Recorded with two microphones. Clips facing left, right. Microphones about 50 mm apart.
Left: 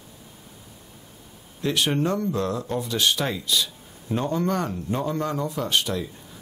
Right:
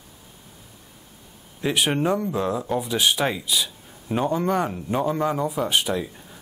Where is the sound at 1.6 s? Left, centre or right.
Centre.